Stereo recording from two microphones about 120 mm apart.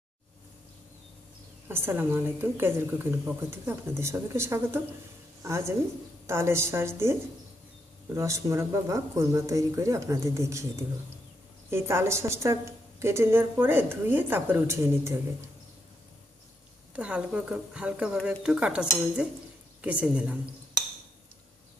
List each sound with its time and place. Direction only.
1.6 s a woman's voice: 20° right (ahead or behind)
11.7 s a woman's voice: 20° right (ahead or behind)
16.9 s a woman's voice: 10° right (ahead or behind)